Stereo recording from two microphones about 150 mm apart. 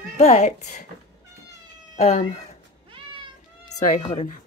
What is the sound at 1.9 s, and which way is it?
Speech, 45° left (ahead or behind).